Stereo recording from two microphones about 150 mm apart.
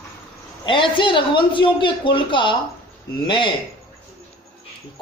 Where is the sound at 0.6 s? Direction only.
35° left (ahead or behind).